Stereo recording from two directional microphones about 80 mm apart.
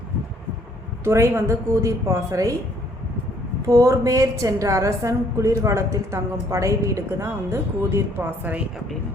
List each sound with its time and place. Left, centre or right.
1.0 s a woman's voice: right
3.7 s a woman's voice: right
8.2 s a woman's voice: right